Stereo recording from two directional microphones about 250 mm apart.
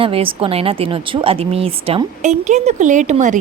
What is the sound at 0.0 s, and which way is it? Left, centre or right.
Speech, right.